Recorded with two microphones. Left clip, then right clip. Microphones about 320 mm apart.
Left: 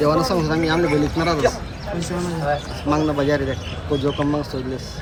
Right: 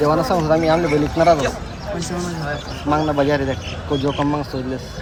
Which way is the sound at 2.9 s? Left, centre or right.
Centre.